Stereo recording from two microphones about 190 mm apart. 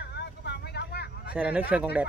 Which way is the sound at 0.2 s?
60° left (ahead or behind).